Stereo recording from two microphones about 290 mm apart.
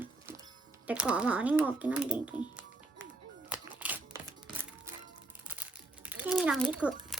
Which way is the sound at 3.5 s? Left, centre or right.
Centre.